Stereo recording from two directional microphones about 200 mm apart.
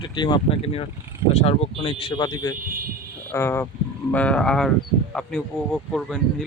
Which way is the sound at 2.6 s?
45° right (ahead or behind).